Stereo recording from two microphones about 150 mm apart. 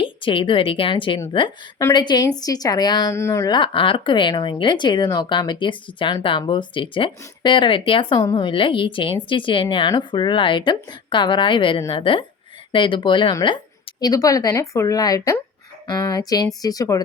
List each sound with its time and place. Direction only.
0.0 s a woman's voice: 35° left (ahead or behind)